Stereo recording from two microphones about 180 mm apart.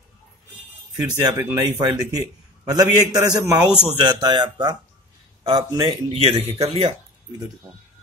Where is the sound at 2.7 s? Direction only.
20° right (ahead or behind).